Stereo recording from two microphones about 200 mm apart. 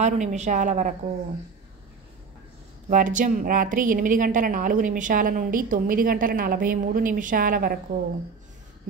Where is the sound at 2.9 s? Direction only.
40° right (ahead or behind).